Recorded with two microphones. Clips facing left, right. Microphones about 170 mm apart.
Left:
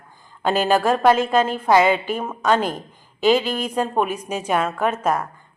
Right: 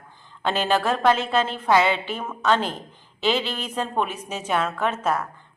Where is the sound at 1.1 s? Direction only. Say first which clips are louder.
Left 4 dB; 45° left (ahead or behind).